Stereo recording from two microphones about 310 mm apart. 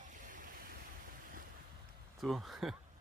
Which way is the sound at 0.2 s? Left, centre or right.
Right.